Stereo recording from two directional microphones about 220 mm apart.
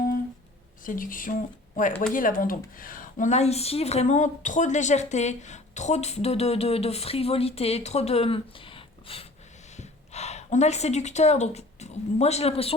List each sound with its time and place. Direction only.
0.9 s a woman's voice: 40° left (ahead or behind)